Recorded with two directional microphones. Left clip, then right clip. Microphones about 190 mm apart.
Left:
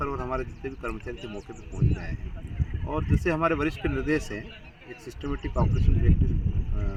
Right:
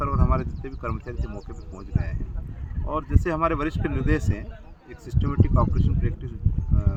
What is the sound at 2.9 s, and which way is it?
Speech, 25° right (ahead or behind).